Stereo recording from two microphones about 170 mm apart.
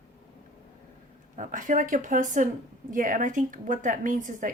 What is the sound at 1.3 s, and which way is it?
Speech, 50° right (ahead or behind).